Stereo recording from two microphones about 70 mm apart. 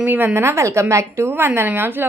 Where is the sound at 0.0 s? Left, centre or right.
Right.